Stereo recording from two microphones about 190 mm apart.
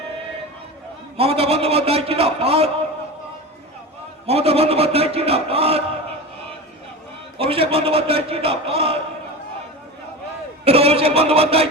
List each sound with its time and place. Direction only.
1.1 s a man's voice: 30° right (ahead or behind)
4.3 s a man's voice: 30° right (ahead or behind)
7.3 s a man's voice: 30° right (ahead or behind)
10.7 s a man's voice: 30° right (ahead or behind)